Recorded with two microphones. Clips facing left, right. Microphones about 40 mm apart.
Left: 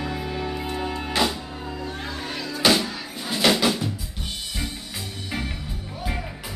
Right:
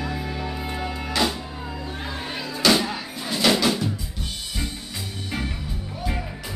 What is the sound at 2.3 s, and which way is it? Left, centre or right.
Music, centre.